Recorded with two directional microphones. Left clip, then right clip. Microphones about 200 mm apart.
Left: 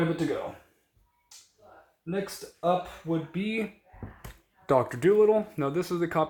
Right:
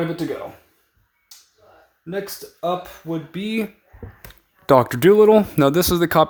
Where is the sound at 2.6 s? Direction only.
50° right (ahead or behind).